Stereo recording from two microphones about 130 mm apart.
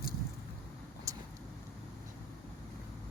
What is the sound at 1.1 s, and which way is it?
Vehicle, 25° right (ahead or behind).